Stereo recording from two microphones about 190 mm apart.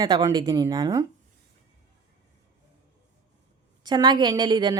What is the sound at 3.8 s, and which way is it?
Speech, 20° right (ahead or behind).